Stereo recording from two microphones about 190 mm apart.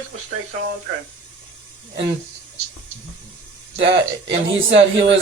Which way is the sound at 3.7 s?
65° right (ahead or behind).